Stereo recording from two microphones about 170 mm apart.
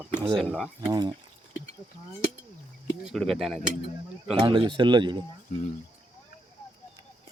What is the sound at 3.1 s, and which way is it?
Speech, centre (ahead or behind).